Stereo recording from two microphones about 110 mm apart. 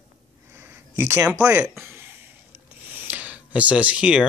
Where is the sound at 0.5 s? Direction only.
20° right (ahead or behind).